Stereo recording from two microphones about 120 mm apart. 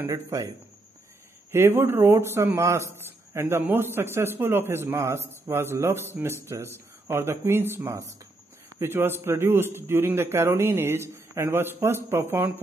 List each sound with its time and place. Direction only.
0.1 s speech: 30° right (ahead or behind)
1.5 s speech: 20° right (ahead or behind)